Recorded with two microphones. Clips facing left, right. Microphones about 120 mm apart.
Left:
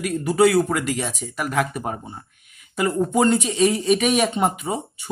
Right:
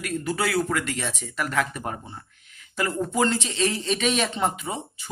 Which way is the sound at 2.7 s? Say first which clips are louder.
Left 5 dB; 25° left (ahead or behind).